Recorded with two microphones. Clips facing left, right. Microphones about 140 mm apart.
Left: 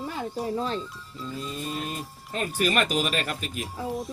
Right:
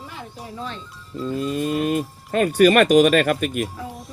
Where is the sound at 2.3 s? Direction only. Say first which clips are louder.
Right 11 dB; 75° right (ahead or behind).